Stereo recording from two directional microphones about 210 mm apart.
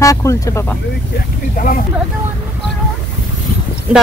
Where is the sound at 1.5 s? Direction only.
40° left (ahead or behind).